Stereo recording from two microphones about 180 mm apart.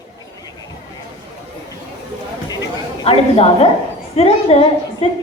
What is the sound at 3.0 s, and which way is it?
A woman's voice, 35° left (ahead or behind).